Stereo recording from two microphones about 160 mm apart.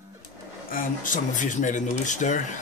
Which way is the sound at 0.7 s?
55° left (ahead or behind).